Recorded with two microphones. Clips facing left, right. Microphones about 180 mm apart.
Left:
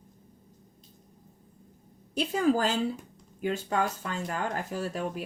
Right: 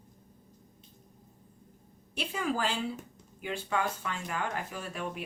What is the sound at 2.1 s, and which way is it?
Speech, 40° left (ahead or behind).